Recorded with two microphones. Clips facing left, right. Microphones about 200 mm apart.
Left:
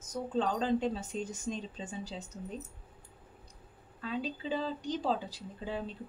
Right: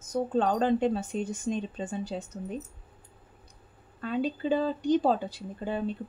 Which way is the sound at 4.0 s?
55° right (ahead or behind).